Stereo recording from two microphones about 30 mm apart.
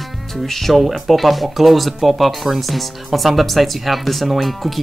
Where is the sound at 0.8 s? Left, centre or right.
Centre.